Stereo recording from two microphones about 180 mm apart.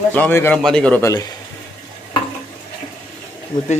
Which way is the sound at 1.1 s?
20° left (ahead or behind).